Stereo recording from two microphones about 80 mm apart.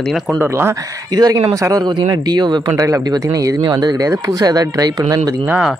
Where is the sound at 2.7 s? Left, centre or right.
Right.